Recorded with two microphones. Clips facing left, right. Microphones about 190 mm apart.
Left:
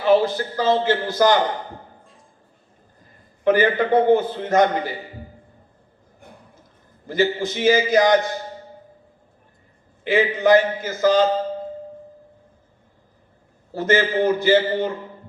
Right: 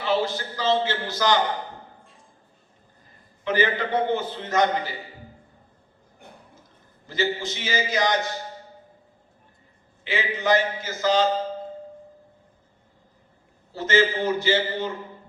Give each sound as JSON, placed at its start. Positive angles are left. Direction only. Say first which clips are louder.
{"t": 0.0, "sound": "a man's voice", "louder": "left 7 dB", "side_deg": 55}
{"t": 3.4, "sound": "a man's voice", "louder": "left 6 dB", "side_deg": 55}
{"t": 7.1, "sound": "a man's voice", "louder": "left 6 dB", "side_deg": 55}
{"t": 10.0, "sound": "a man's voice", "louder": "left 9 dB", "side_deg": 55}
{"t": 13.7, "sound": "a man's voice", "louder": "left 3 dB", "side_deg": 55}